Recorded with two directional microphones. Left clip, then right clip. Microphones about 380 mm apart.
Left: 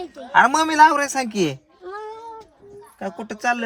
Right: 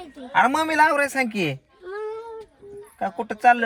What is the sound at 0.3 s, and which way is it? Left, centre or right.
Speech, centre.